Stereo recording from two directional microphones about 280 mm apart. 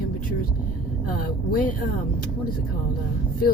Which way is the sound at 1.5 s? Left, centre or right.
Left.